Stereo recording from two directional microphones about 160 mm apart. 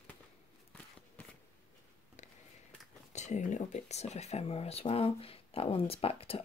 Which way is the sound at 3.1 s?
45° left (ahead or behind).